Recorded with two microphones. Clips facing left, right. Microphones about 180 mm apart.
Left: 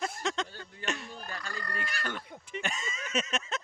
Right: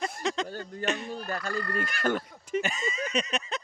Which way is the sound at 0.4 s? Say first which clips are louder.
Right 10 dB; 45° right (ahead or behind).